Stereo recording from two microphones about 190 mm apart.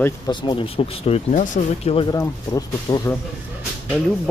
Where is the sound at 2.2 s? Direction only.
20° left (ahead or behind).